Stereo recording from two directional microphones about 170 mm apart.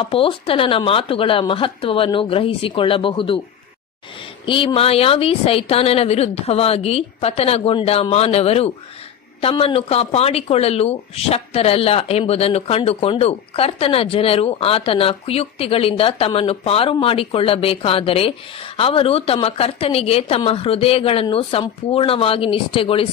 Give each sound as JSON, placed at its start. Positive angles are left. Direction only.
{"t": 0.0, "sound": "speech", "side_deg": 30}
{"t": 4.5, "sound": "speech", "side_deg": 30}